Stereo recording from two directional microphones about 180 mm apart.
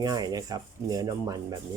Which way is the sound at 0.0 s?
20° right (ahead or behind).